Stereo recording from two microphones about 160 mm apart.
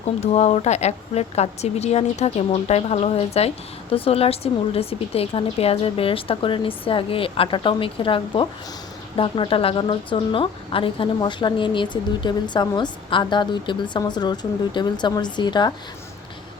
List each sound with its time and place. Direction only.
0.2 s speech: 45° left (ahead or behind); by 15.7 s 25° left (ahead or behind)